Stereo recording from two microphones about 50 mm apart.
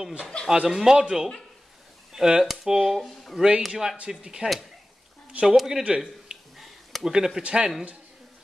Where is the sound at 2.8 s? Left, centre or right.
Centre.